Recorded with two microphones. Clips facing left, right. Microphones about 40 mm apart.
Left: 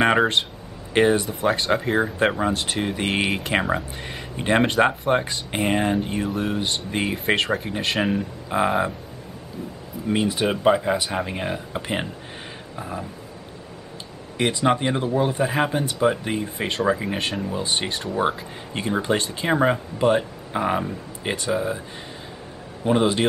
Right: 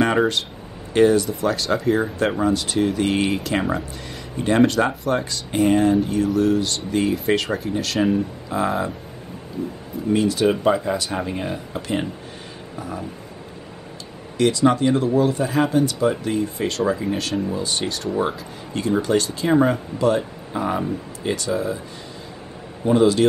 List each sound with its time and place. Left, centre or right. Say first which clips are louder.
0.0 s speech: even; left
7.3 s speech: even; centre
7.7 s speech: right 7 dB; left
10.0 s speech: right 4 dB; left
14.4 s speech: right 3 dB; left
22.8 s speech: right 3 dB; left